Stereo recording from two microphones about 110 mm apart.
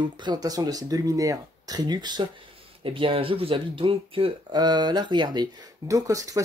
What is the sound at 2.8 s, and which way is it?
Speech, 55° right (ahead or behind).